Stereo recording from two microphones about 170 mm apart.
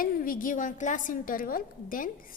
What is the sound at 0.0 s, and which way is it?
A woman's voice, 55° left (ahead or behind).